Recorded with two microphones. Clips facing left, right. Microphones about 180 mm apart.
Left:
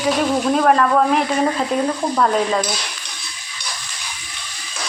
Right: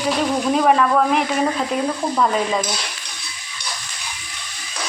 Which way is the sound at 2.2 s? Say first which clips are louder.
Left 2 dB; 5° right (ahead or behind).